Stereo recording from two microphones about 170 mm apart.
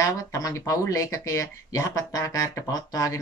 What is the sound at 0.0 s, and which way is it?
Speech, 20° left (ahead or behind).